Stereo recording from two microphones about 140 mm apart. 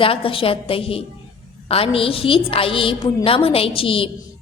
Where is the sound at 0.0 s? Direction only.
40° left (ahead or behind).